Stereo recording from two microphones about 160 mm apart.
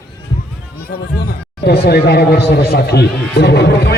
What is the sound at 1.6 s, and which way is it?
Speech, 80° left.